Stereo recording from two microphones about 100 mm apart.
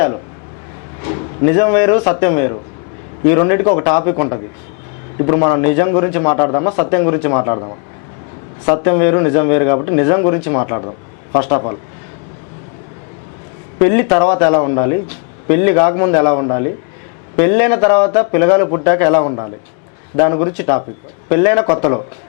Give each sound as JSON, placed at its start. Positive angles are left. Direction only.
{"t": 1.0, "sound": "speech", "side_deg": 15}
{"t": 13.7, "sound": "speech", "side_deg": 15}